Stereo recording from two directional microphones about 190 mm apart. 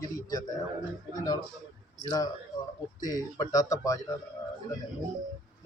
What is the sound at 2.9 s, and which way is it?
Speech, 20° left (ahead or behind).